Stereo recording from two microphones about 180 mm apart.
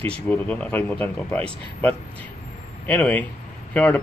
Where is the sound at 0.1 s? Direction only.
5° left (ahead or behind).